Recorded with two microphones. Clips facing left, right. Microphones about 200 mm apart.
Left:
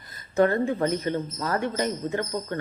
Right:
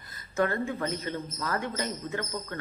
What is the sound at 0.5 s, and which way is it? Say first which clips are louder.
Speech: left 7 dB; 35° left (ahead or behind).